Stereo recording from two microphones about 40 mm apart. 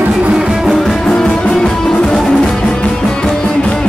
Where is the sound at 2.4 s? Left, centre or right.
Centre.